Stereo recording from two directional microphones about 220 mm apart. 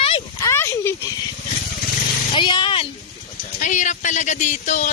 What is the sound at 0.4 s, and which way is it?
Speech, 10° left (ahead or behind).